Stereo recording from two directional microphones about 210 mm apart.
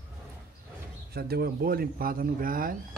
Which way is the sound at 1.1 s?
50° right (ahead or behind).